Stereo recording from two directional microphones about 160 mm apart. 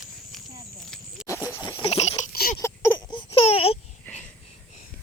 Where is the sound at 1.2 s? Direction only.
5° right (ahead or behind).